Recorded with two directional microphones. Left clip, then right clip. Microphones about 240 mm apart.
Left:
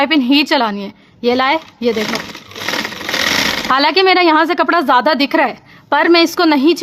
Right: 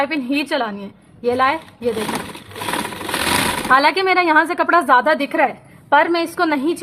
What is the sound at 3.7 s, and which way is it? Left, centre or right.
Speech, left.